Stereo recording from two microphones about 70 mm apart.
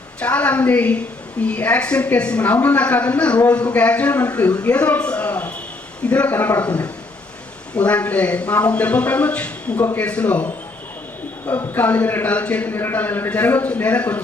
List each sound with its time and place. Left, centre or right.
0.2 s a woman's voice: centre
7.8 s a woman's voice: centre